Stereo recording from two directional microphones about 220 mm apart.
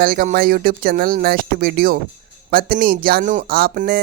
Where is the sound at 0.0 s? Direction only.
40° right (ahead or behind).